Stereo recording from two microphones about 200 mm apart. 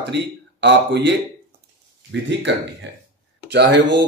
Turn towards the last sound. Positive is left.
turn(degrees=-60)  # may be behind; listen again after turning